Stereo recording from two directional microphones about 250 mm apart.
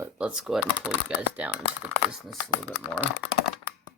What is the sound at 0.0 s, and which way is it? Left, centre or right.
Speech, centre.